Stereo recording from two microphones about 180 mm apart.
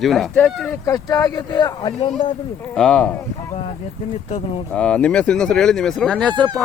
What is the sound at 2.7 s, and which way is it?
Speech, 5° left (ahead or behind).